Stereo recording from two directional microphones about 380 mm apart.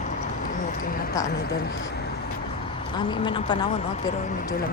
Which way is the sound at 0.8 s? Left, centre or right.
Left.